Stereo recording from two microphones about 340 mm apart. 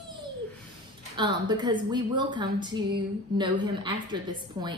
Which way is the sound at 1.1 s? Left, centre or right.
Centre.